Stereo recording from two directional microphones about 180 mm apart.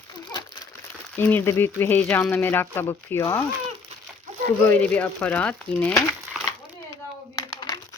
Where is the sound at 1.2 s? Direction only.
15° left (ahead or behind).